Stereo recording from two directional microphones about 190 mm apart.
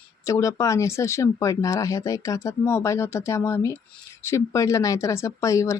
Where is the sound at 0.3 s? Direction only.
15° left (ahead or behind).